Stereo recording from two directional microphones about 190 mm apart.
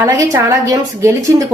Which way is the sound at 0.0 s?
15° right (ahead or behind).